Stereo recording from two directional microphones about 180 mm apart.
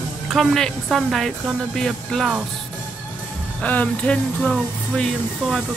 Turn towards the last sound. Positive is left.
turn(degrees=0)  # may be behind; listen again after turning